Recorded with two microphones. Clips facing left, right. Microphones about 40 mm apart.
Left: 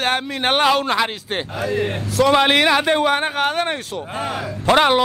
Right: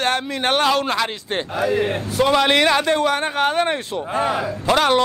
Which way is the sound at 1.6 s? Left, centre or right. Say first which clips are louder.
Right 3 dB; centre.